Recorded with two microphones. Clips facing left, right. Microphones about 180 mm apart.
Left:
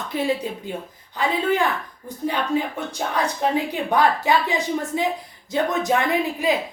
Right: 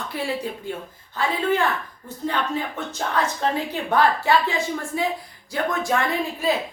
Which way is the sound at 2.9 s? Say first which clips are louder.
Even; 15° left (ahead or behind).